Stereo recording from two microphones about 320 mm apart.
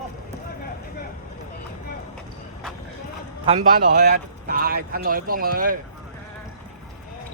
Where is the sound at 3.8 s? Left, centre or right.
Right.